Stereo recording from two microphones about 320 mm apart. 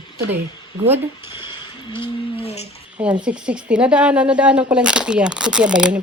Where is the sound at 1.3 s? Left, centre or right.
Centre.